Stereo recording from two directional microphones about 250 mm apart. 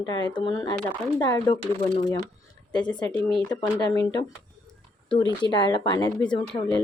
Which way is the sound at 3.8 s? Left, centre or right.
Centre.